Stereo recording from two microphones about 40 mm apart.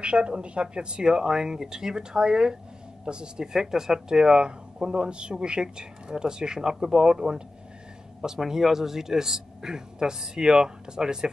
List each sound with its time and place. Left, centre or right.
0.0 s speech: right
3.5 s speech: centre